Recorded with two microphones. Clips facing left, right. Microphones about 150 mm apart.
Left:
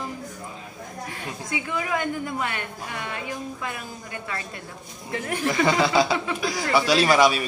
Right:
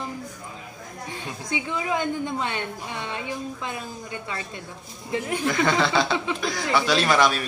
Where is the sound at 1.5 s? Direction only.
20° right (ahead or behind).